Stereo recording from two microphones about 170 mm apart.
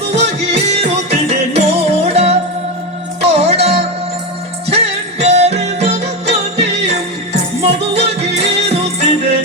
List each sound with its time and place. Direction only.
0.5 s music: 40° right (ahead or behind)